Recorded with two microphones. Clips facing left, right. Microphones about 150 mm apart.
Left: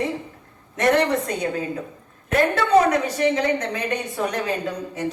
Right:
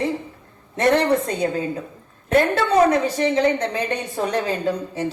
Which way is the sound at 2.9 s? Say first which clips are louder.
Right 2 dB; 30° right (ahead or behind).